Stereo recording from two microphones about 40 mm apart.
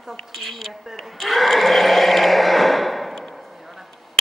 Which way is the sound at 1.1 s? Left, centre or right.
Centre.